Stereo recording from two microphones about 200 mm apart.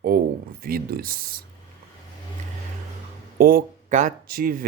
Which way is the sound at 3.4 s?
45° right (ahead or behind).